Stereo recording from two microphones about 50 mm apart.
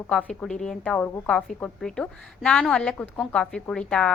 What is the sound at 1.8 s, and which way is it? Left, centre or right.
A woman's voice, centre.